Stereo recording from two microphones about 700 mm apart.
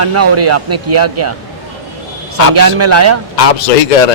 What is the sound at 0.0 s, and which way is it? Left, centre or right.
Speech, centre.